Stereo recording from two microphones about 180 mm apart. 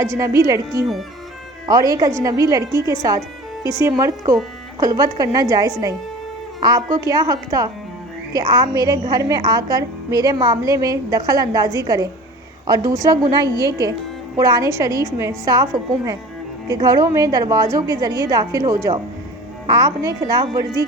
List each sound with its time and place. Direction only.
0.0 s a woman's voice: 15° right (ahead or behind)
3.6 s speech: 20° left (ahead or behind)
3.8 s a woman's voice: 15° right (ahead or behind)